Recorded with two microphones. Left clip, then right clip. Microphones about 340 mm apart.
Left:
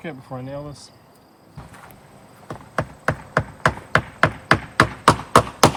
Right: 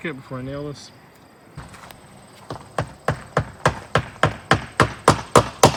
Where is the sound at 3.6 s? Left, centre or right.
Centre.